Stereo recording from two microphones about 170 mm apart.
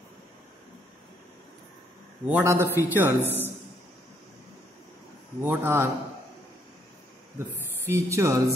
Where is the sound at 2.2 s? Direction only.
10° right (ahead or behind).